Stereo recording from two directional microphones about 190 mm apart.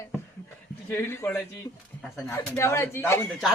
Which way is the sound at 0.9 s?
10° left (ahead or behind).